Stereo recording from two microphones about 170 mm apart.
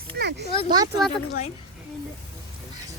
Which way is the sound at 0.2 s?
80° right.